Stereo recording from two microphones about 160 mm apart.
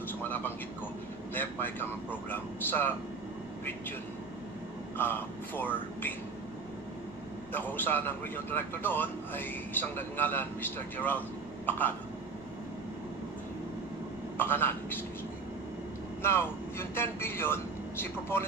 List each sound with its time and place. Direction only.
0.2 s a man's voice: 10° left (ahead or behind)
4.9 s a man's voice: 10° left (ahead or behind)
7.5 s a man's voice: 10° left (ahead or behind)
14.3 s a woman's voice: 15° left (ahead or behind)
16.2 s speech: 15° left (ahead or behind)